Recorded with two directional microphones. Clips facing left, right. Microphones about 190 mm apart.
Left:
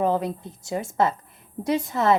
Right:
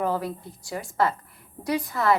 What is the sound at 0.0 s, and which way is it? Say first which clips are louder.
A woman's voice: left 4 dB; 20° left (ahead or behind).